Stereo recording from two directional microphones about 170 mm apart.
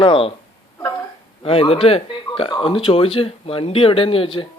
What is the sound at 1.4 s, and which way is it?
Speech, 35° left (ahead or behind).